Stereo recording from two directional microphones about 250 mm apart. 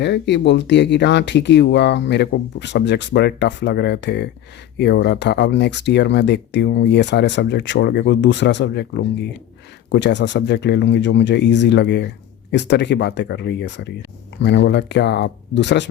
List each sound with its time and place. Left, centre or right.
0.0 s speech: left